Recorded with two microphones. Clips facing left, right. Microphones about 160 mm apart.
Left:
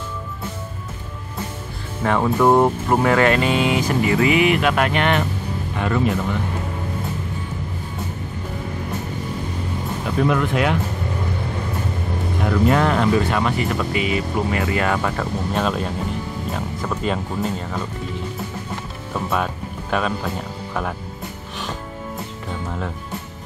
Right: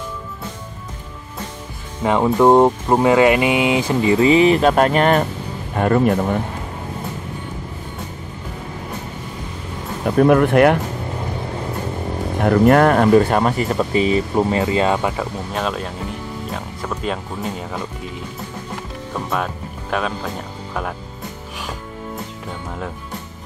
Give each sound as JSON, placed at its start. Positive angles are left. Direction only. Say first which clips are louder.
{"t": 2.0, "sound": "speech", "louder": "right 3 dB", "side_deg": -20}
{"t": 10.0, "sound": "speech", "louder": "right 7 dB", "side_deg": -50}
{"t": 12.4, "sound": "speech", "louder": "right 6 dB", "side_deg": -55}
{"t": 15.5, "sound": "speech", "louder": "left 1 dB", "side_deg": 0}
{"t": 19.3, "sound": "speech", "louder": "even", "side_deg": 0}